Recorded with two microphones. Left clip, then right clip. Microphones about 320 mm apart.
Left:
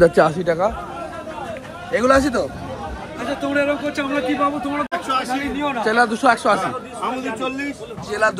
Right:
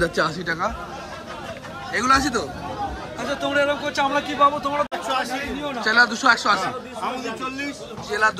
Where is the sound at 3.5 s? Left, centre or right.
Centre.